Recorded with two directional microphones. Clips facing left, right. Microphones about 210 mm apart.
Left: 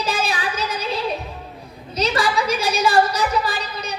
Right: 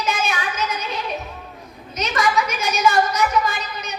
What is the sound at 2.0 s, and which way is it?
A woman's voice, 35° left (ahead or behind).